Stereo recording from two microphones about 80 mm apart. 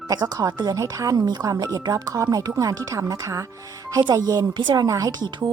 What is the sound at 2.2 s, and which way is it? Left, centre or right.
Speech, right.